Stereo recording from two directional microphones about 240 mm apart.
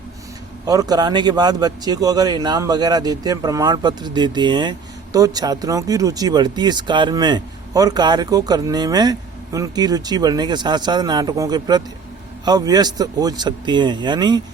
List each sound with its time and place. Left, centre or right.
0.7 s speech: centre